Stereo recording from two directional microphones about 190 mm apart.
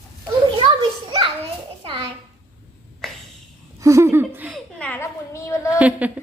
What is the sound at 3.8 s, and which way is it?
Laughter, 15° right (ahead or behind).